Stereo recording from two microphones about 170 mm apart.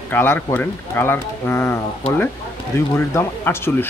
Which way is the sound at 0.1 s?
15° left (ahead or behind).